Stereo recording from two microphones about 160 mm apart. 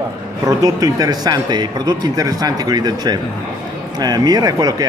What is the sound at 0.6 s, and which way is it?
Speech, 20° right (ahead or behind).